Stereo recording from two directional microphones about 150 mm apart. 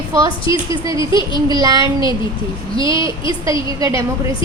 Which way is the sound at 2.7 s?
35° left (ahead or behind).